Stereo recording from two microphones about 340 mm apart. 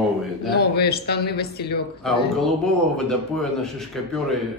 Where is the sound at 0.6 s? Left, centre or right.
Left.